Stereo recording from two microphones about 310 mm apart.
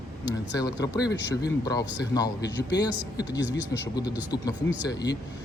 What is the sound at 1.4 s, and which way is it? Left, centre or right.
Speech, centre.